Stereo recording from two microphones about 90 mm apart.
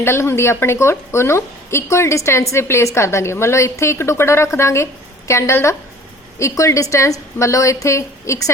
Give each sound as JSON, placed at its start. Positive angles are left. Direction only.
{"t": 0.0, "sound": "a woman's voice", "side_deg": 30}